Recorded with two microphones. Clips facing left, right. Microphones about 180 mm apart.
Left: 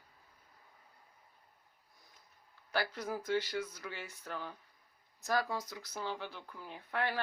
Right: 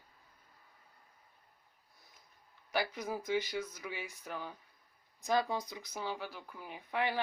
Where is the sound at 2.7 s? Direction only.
15° right (ahead or behind).